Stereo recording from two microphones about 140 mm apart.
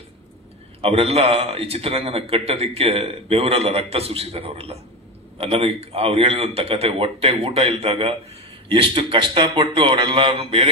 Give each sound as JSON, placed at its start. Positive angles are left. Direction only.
{"t": 0.7, "sound": "a man's voice", "side_deg": -45}